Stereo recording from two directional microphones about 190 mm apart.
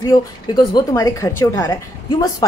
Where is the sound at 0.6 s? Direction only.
15° left (ahead or behind).